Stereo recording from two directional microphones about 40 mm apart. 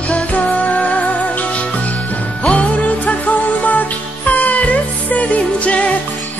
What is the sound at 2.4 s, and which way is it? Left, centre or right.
Music, left.